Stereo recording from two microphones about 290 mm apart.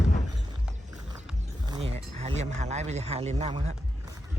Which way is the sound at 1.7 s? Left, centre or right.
Centre.